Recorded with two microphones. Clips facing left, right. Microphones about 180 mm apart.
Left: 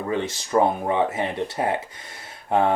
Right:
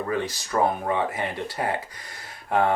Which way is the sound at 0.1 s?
25° left (ahead or behind).